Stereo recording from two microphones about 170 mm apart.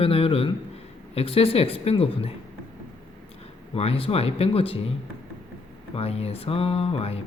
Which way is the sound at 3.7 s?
35° left (ahead or behind).